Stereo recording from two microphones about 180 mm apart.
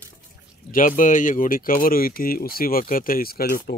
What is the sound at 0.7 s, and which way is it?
Speech, 45° left (ahead or behind).